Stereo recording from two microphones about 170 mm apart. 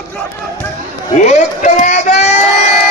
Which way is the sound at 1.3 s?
45° left (ahead or behind).